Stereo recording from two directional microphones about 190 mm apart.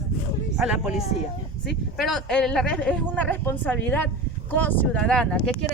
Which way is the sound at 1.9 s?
Centre (ahead or behind).